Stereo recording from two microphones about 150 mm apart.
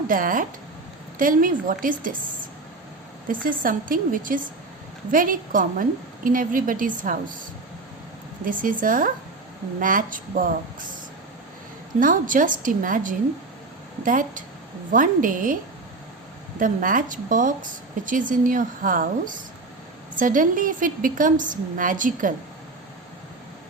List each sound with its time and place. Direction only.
0.1 s a woman's voice: 65° right (ahead or behind)
3.2 s a woman's voice: 65° right (ahead or behind)
8.4 s a woman's voice: 65° right (ahead or behind)
11.9 s a woman's voice: 65° right (ahead or behind)
16.6 s a woman's voice: 65° right (ahead or behind)